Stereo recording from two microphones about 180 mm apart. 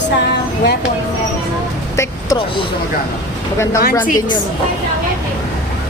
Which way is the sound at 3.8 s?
50° left (ahead or behind).